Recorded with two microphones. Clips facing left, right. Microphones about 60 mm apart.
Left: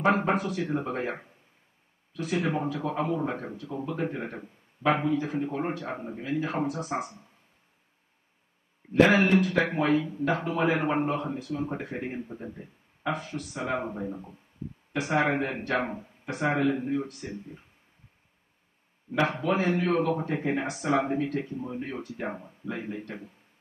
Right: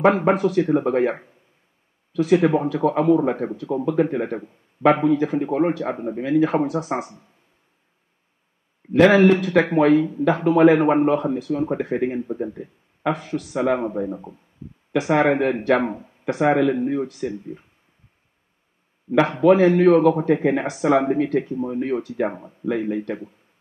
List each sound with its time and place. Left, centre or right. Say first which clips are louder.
0.0 s speech: right 8 dB; right
2.1 s speech: right 12 dB; right
2.7 s speech: right 11 dB; right
3.5 s speech: right 12 dB; right
8.9 s speech: right 7 dB; right
10.2 s speech: right 11 dB; right
14.0 s speech: right 7 dB; right
14.9 s speech: right 10 dB; right
15.1 s speech: right 7 dB; right
17.2 s speech: right 11 dB; right
19.1 s speech: right 11 dB; right